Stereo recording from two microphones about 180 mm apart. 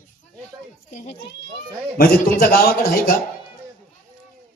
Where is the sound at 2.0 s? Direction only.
55° left (ahead or behind).